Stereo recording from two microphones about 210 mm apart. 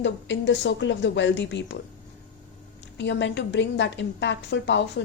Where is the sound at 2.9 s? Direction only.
55° left (ahead or behind).